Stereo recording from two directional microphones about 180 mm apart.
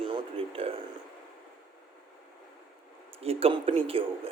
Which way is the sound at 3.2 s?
35° right (ahead or behind).